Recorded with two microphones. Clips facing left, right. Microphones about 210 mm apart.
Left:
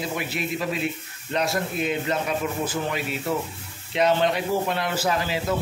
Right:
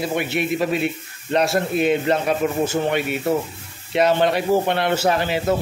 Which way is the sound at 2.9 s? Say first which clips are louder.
Right 6 dB; 65° right (ahead or behind).